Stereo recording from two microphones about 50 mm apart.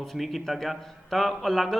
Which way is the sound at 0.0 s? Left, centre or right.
Centre.